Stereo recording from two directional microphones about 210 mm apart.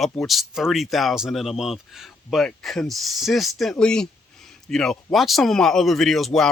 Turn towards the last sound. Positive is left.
turn(degrees=0)  # may be behind; listen again after turning